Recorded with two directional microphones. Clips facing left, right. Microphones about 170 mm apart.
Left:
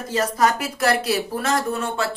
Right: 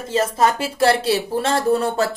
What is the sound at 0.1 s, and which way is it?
Speech, 25° right (ahead or behind).